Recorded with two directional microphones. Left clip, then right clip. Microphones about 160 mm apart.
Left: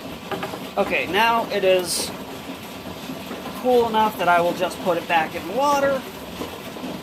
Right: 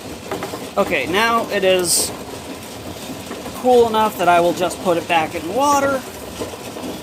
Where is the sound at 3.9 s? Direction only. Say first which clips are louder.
Right 3 dB; 70° right (ahead or behind).